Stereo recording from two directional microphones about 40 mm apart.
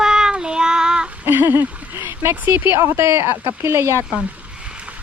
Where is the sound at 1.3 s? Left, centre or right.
Right.